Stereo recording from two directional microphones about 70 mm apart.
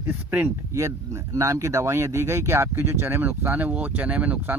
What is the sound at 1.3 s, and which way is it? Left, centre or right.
Speech, right.